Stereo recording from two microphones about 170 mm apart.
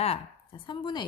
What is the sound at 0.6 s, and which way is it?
Speech, 25° left (ahead or behind).